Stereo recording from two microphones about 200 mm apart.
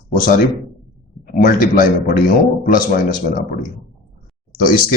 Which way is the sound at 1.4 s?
40° left (ahead or behind).